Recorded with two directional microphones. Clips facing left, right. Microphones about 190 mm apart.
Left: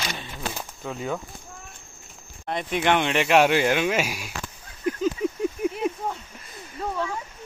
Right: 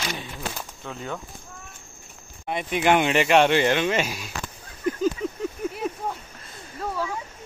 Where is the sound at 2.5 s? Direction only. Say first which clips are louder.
Right 2 dB; 5° right (ahead or behind).